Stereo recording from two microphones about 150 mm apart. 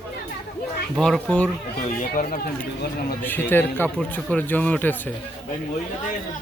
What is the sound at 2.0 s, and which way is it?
Speech, 65° left (ahead or behind).